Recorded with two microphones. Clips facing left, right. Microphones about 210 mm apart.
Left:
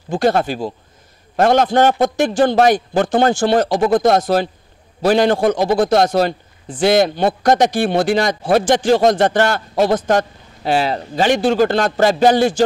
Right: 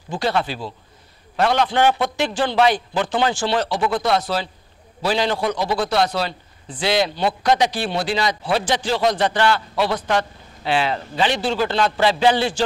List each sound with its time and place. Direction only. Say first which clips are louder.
0.1 s a man's voice: left 6 dB; 45° left (ahead or behind)